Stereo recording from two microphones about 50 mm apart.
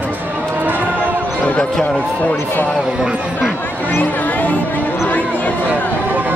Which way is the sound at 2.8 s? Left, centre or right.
Centre.